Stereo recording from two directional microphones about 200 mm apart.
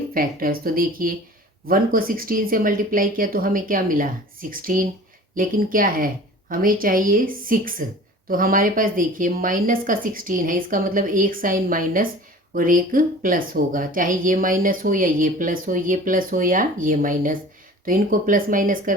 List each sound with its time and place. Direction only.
0.1 s speech: 45° right (ahead or behind)